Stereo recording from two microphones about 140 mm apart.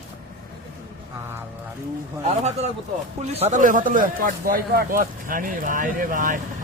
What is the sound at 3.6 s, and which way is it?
Speech, 70° right (ahead or behind).